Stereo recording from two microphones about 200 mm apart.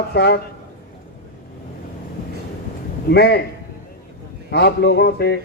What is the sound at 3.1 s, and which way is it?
Speech, 55° left (ahead or behind).